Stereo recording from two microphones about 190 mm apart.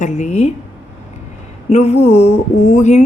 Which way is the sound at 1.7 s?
35° left (ahead or behind).